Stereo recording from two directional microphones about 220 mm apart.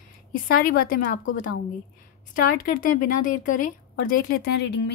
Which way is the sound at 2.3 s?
40° left (ahead or behind).